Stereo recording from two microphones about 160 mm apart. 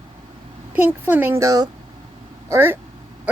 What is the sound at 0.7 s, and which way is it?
Speech, 10° right (ahead or behind).